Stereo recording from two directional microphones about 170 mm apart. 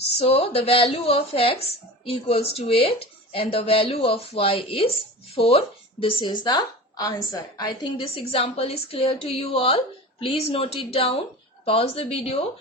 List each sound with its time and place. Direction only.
0.2 s a woman's voice: 35° left (ahead or behind)